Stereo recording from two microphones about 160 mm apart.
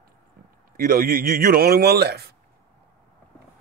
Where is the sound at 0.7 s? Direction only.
60° right (ahead or behind); by 2.3 s 85° right.